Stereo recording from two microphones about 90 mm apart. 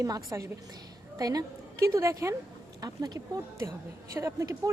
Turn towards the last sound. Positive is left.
turn(degrees=-40)  # may be behind; listen again after turning